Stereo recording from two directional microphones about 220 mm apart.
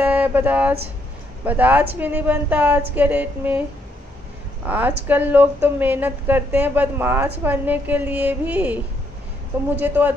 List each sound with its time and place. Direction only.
0.0 s a woman's voice: 5° right (ahead or behind)
4.6 s a woman's voice: 10° right (ahead or behind)
9.8 s a woman's voice: 10° right (ahead or behind)